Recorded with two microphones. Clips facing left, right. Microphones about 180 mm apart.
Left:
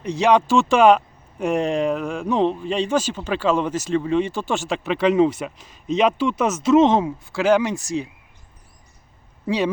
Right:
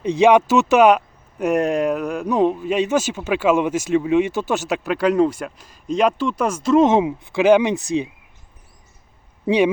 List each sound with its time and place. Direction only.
0.2 s speech: 10° right (ahead or behind); by 6.8 s 5° left (ahead or behind)
6.8 s a man's voice: 10° right (ahead or behind)